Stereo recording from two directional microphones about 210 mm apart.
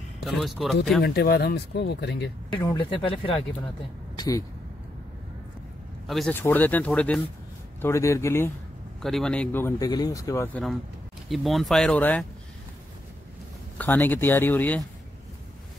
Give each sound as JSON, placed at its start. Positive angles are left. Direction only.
{"t": 0.2, "sound": "speech", "side_deg": 0}
{"t": 1.0, "sound": "speech", "side_deg": 50}
{"t": 2.5, "sound": "speech", "side_deg": 20}
{"t": 6.0, "sound": "speech", "side_deg": 0}
{"t": 13.7, "sound": "speech", "side_deg": 10}